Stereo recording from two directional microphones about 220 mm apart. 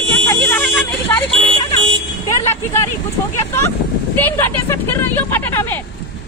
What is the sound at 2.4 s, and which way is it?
Speech, 10° left (ahead or behind).